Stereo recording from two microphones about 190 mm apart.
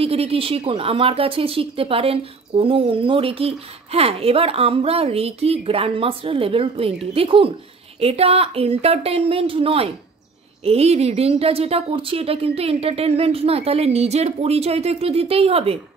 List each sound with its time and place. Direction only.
0.0 s a woman's voice: 30° right (ahead or behind)